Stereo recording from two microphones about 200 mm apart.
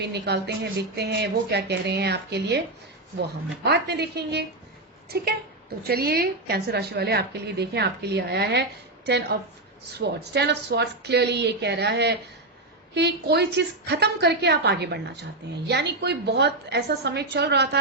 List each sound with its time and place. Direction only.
0.0 s a woman's voice: 55° right (ahead or behind)
3.6 s a woman's voice: 55° right (ahead or behind)
10.0 s a woman's voice: 55° right (ahead or behind)